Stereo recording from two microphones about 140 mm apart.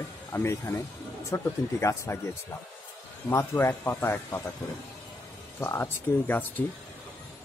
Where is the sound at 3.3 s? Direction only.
20° left (ahead or behind).